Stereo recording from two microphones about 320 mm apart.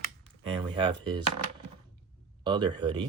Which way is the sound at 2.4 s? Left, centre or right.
Centre.